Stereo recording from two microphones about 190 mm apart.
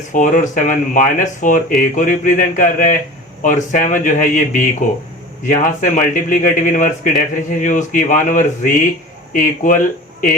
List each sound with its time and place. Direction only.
0.1 s speech: 45° left (ahead or behind)